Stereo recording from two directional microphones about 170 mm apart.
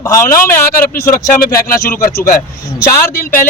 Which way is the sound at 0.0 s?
15° left (ahead or behind).